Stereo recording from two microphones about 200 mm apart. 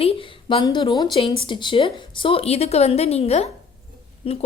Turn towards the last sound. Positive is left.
turn(degrees=30)  # may be behind; listen again after turning